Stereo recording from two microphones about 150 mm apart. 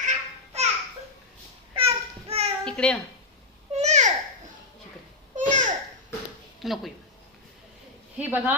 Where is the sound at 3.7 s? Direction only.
50° right (ahead or behind).